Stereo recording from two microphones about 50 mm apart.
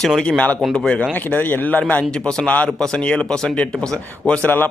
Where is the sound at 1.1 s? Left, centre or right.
Left.